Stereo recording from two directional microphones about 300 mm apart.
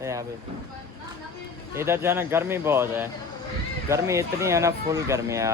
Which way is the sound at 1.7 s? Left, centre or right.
Centre.